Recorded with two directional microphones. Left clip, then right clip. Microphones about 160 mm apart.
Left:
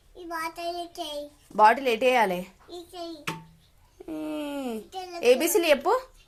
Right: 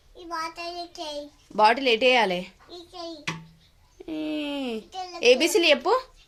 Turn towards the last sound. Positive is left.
turn(degrees=-10)  # may be behind; listen again after turning